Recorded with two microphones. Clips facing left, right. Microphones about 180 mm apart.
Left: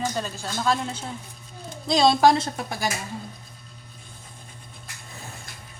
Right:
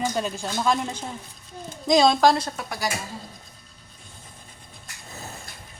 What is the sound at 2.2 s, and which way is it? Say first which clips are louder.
Speech: left 1 dB; 25° left (ahead or behind).